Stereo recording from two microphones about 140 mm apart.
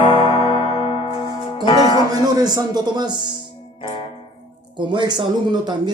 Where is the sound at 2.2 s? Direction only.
30° right (ahead or behind).